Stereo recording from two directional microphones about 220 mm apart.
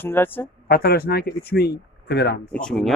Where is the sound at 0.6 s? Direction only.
45° left (ahead or behind).